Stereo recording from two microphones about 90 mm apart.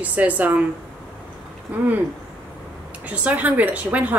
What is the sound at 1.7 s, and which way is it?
Owl, 20° right (ahead or behind).